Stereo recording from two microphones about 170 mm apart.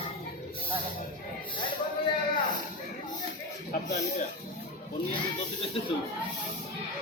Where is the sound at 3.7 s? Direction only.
45° left (ahead or behind).